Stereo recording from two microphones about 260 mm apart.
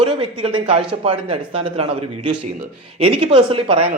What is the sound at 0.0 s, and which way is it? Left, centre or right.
A man's voice, centre.